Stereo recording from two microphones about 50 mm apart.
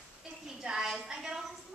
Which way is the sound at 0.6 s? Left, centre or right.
Centre.